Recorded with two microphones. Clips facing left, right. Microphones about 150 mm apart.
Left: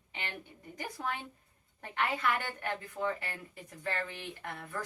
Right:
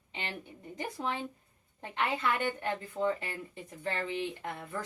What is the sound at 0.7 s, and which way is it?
Speech, 20° right (ahead or behind).